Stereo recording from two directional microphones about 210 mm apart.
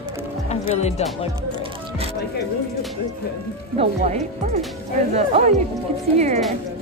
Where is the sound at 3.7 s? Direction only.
30° right (ahead or behind).